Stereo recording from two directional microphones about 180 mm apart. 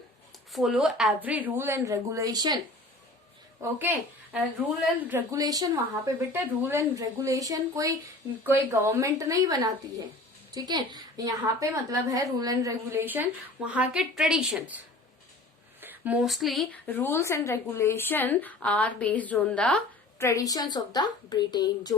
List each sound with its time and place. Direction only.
0.5 s a woman's voice: centre (ahead or behind); by 2.6 s 20° right (ahead or behind)
3.6 s a woman's voice: 10° right (ahead or behind)
15.8 s speech: 10° right (ahead or behind)
16.8 s speech: 10° left (ahead or behind)